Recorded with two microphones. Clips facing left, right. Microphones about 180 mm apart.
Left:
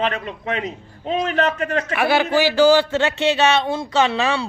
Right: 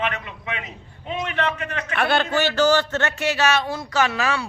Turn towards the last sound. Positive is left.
turn(degrees=25)  # may be behind; listen again after turning